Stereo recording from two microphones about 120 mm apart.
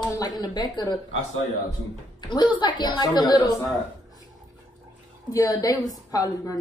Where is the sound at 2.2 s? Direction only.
40° left (ahead or behind).